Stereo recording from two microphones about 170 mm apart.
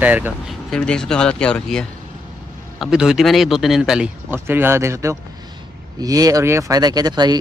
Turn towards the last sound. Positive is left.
turn(degrees=-25)  # may be behind; listen again after turning